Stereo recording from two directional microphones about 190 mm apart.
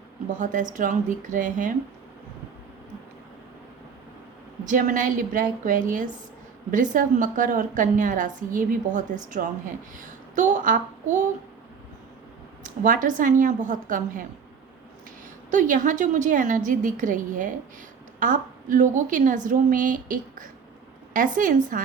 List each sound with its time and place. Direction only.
0.3 s a woman's voice: 40° right (ahead or behind)
4.6 s a woman's voice: 45° right (ahead or behind)
12.6 s a woman's voice: 45° right (ahead or behind)
15.4 s a woman's voice: 40° right (ahead or behind)